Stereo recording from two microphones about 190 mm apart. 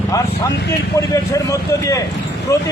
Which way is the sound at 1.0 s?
15° left (ahead or behind).